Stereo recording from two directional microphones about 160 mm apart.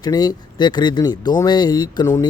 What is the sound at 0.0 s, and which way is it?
Speech, 25° left (ahead or behind).